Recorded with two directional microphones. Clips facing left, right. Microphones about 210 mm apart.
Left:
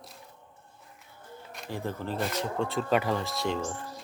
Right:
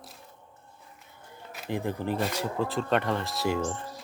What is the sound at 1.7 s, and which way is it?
Speech, 15° right (ahead or behind).